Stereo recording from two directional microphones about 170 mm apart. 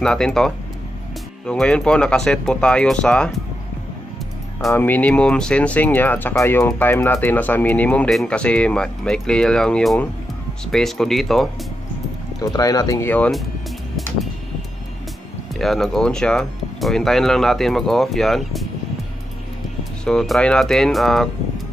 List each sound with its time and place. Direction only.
0.0 s speech: 5° left (ahead or behind)
4.7 s speech: 10° left (ahead or behind)
12.5 s speech: 20° left (ahead or behind)
13.1 s speech: 5° left (ahead or behind)
15.6 s speech: centre (ahead or behind)
19.8 s speech: centre (ahead or behind)